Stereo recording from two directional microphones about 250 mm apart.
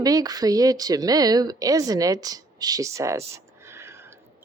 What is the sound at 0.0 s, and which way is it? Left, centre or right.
A woman's voice, centre.